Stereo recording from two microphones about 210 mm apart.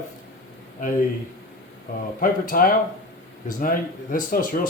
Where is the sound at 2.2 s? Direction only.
40° left (ahead or behind).